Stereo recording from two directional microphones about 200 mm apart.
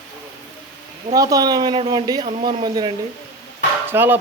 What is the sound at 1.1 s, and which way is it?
Speech, 15° right (ahead or behind).